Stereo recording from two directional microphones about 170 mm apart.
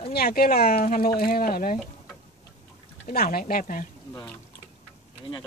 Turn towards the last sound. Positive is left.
turn(degrees=55)  # may be behind; listen again after turning